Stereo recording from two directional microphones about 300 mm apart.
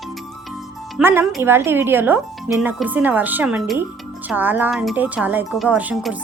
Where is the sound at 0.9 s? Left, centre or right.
Centre.